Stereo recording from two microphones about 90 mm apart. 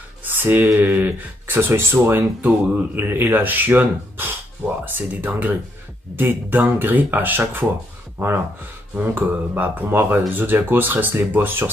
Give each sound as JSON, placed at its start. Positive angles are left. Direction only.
{"t": 0.2, "sound": "a sound", "side_deg": -20}
{"t": 0.7, "sound": "speech", "side_deg": -20}
{"t": 8.9, "sound": "speech", "side_deg": -20}